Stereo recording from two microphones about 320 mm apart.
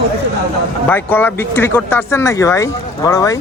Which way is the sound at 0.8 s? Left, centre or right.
Centre.